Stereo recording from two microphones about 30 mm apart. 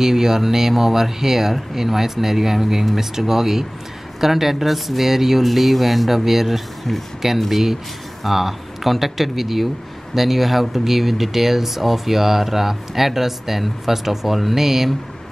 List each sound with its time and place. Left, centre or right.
0.0 s speech: centre